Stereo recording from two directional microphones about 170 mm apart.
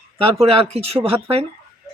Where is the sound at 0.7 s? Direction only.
35° right (ahead or behind).